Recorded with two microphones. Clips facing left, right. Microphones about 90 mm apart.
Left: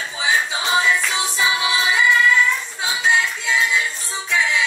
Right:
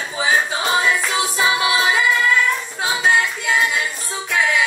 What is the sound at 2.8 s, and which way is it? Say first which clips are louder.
Singing: right 3 dB; 40° right (ahead or behind).